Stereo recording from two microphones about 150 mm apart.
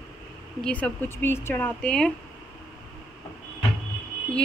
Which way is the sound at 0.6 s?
10° left (ahead or behind).